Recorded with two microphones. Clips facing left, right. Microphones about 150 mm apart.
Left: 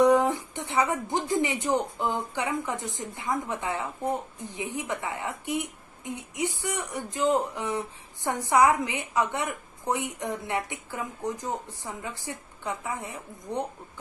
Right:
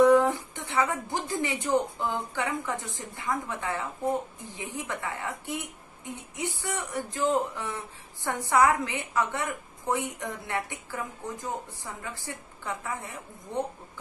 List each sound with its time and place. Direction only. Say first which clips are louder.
0.0 s a woman's voice: right 1 dB; 15° left (ahead or behind)